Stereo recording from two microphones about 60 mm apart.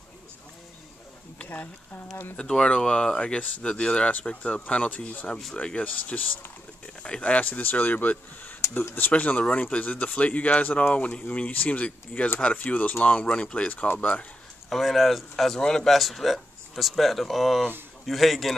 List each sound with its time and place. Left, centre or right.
1.4 s a sound: left
2.3 s speech: centre
12.6 s speech: left
14.7 s speech: centre